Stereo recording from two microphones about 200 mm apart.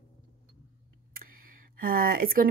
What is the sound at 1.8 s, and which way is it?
Speech, 45° right (ahead or behind).